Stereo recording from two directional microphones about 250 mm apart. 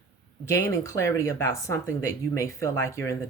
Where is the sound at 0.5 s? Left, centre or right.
Centre.